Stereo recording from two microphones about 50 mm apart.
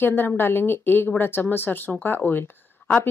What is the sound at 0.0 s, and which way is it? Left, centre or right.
Speech, left.